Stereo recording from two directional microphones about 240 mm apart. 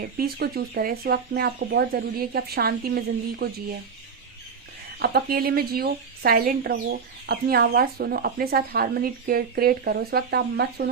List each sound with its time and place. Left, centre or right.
0.2 s speech: right
4.9 s speech: right